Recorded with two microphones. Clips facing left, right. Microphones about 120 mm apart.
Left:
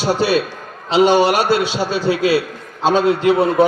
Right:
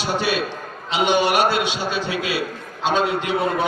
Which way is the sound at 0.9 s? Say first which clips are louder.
Left 6 dB; 35° left (ahead or behind).